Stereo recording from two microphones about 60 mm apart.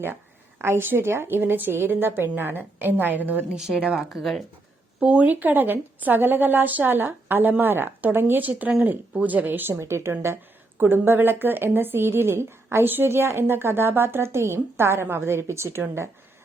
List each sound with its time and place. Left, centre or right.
0.6 s a woman's voice: right
3.5 s speech: centre
3.9 s speech: centre
4.9 s a woman's voice: right
9.8 s a woman's voice: right